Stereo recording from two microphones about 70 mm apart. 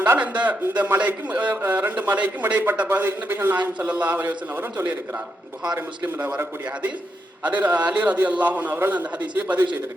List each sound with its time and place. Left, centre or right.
0.0 s a man's voice: right
6.1 s a man's voice: right
7.4 s a man's voice: right